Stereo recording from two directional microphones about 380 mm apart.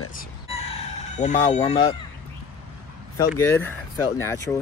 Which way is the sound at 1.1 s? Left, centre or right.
Centre.